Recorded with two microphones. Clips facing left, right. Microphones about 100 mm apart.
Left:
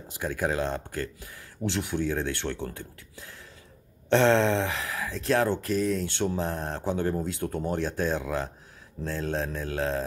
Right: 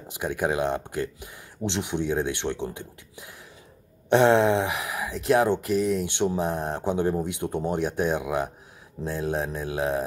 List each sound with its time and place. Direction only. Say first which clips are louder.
0.1 s speech: right 2 dB; 20° right (ahead or behind)